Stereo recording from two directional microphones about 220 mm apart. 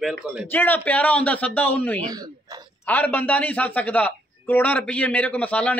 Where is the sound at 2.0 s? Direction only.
15° right (ahead or behind).